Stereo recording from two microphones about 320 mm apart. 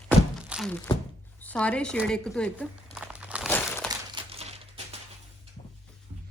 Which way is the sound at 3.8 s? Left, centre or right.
Centre.